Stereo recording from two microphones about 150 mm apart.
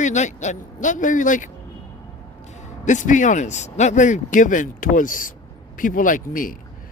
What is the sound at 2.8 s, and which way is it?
A man's voice, 55° left (ahead or behind).